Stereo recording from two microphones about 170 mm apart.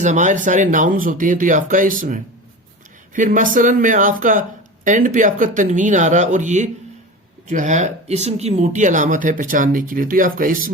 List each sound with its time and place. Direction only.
0.0 s speech: 45° right (ahead or behind)